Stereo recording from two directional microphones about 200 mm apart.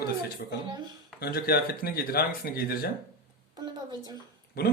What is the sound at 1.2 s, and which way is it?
Speech, 50° left (ahead or behind).